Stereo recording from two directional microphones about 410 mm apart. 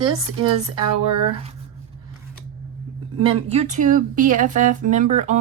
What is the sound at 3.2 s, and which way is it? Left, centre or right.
Speech, centre.